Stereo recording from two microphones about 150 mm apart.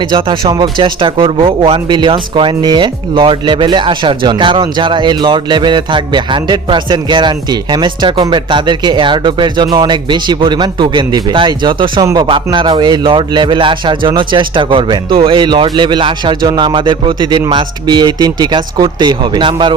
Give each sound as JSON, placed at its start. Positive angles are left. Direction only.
{"t": 0.0, "sound": "speech", "side_deg": -35}